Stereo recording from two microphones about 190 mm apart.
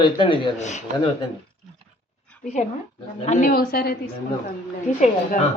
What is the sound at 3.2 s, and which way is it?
Speech, 35° left (ahead or behind).